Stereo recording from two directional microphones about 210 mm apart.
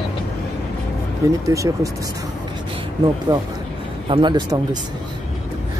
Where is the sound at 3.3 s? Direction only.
20° right (ahead or behind).